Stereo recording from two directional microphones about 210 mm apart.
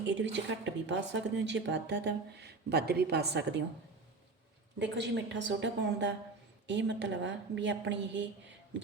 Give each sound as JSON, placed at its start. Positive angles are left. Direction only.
{"t": 0.0, "sound": "speech", "side_deg": -60}
{"t": 4.8, "sound": "speech", "side_deg": -55}